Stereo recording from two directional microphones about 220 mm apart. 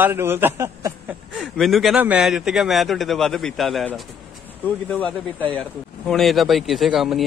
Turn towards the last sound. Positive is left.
turn(degrees=0)  # may be behind; listen again after turning